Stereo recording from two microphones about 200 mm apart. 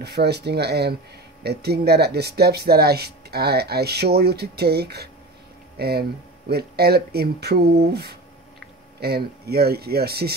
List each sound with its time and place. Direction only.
0.0 s speech: 55° right (ahead or behind)